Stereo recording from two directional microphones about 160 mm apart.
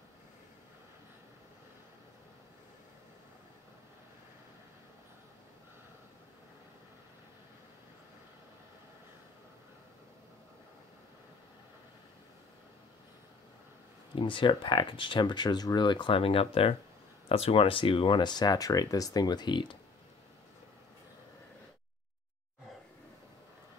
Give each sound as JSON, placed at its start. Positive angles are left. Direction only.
{"t": 14.1, "sound": "speech", "side_deg": 30}